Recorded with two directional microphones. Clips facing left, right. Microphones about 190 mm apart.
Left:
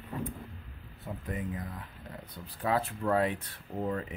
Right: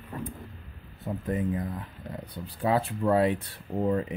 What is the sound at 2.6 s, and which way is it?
Speech, 25° right (ahead or behind).